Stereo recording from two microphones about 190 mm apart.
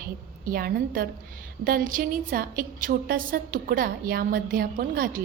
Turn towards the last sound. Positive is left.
turn(degrees=-50)  # may be behind; listen again after turning